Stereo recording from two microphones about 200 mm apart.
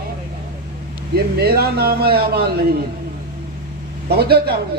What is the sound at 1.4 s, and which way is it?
A man's voice, 50° right (ahead or behind).